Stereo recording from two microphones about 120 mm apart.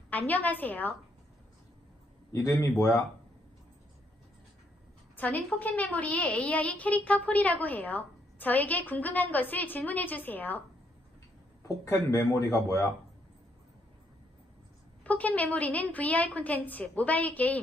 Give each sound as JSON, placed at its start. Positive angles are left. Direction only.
{"t": 0.1, "sound": "a woman's voice", "side_deg": 15}
{"t": 2.3, "sound": "speech", "side_deg": 25}
{"t": 5.1, "sound": "a woman's voice", "side_deg": 15}
{"t": 11.6, "sound": "speech", "side_deg": 20}
{"t": 15.0, "sound": "a woman's voice", "side_deg": 10}